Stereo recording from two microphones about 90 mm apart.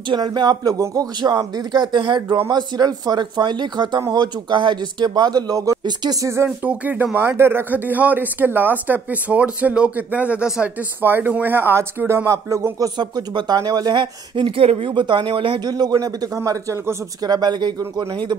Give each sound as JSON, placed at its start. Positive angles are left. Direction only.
{"t": 0.1, "sound": "speech", "side_deg": -55}
{"t": 2.5, "sound": "speech", "side_deg": -50}
{"t": 6.6, "sound": "speech", "side_deg": -15}
{"t": 13.9, "sound": "speech", "side_deg": -65}
{"t": 15.6, "sound": "speech", "side_deg": -50}
{"t": 16.3, "sound": "speech", "side_deg": -30}
{"t": 17.2, "sound": "speech", "side_deg": -50}